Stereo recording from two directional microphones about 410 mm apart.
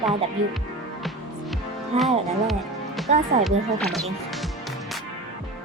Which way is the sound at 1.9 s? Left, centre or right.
Centre.